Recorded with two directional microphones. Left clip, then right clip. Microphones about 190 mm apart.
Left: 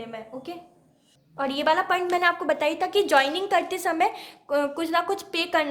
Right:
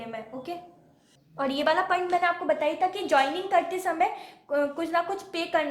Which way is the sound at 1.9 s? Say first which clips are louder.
Left 2 dB; 40° left (ahead or behind).